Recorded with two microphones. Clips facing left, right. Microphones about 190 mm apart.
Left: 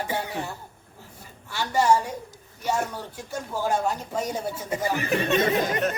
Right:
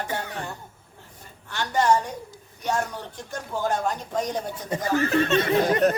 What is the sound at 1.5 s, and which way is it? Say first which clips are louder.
A woman's voice: even; 10° left (ahead or behind).